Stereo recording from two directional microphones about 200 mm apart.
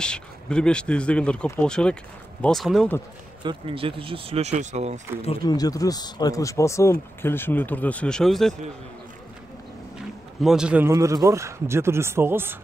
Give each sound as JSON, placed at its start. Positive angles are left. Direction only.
{"t": 0.0, "sound": "speech", "side_deg": 5}
{"t": 3.4, "sound": "speech", "side_deg": -25}
{"t": 5.2, "sound": "speech", "side_deg": 25}
{"t": 10.4, "sound": "speech", "side_deg": -5}